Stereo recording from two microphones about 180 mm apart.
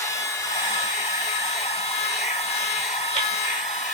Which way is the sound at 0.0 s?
20° left (ahead or behind).